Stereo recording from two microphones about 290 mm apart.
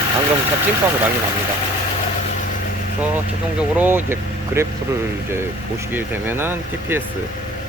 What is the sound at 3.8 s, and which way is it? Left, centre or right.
Speech, centre.